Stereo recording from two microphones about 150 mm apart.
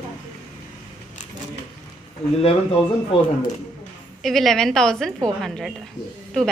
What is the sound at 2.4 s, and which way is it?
Speech, 40° left (ahead or behind).